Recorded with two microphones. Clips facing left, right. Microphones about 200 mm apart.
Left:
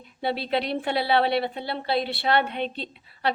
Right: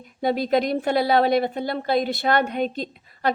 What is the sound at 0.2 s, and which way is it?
A woman's voice, 45° right (ahead or behind).